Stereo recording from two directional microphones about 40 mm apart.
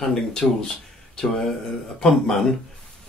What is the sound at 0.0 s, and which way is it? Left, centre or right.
Speech, centre.